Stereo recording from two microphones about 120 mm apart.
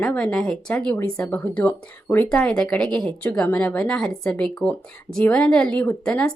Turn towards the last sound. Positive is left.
turn(degrees=5)  # may be behind; listen again after turning